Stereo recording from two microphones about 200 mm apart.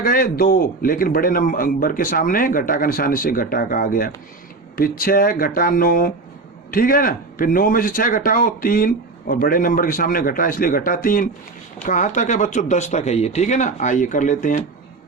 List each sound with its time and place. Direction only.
0.0 s speech: 45° left (ahead or behind)